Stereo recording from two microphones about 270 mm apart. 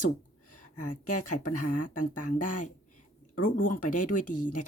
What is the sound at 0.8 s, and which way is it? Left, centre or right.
Speech, left.